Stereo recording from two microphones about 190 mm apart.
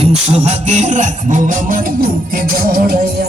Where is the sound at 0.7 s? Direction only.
40° right (ahead or behind).